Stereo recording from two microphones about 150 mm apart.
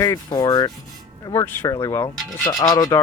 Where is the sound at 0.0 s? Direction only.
25° left (ahead or behind).